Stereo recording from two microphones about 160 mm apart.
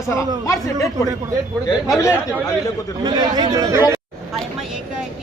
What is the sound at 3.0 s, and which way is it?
Speech, 25° right (ahead or behind).